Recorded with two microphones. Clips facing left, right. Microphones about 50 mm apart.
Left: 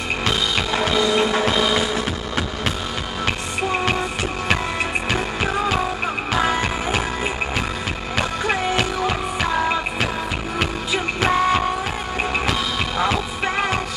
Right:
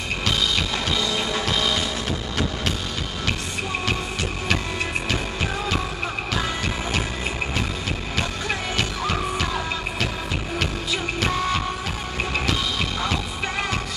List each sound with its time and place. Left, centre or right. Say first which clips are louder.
0.3 s music: left 2 dB; centre
5.1 s music: left 4 dB; centre
8.5 s music: left 5 dB; centre
13.0 s music: left 5 dB; centre